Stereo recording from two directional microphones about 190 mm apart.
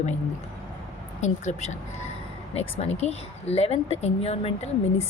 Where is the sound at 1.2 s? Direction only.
40° left (ahead or behind).